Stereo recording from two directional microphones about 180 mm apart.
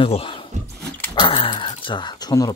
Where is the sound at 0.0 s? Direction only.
30° left (ahead or behind).